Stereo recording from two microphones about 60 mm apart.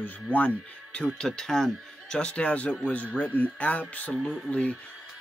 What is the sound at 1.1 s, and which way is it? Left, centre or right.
A man's voice, centre.